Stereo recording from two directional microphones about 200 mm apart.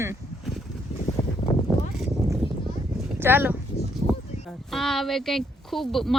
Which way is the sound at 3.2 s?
10° right (ahead or behind).